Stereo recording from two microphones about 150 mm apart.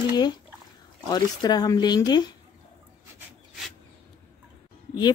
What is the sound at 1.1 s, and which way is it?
Speech, 25° left (ahead or behind).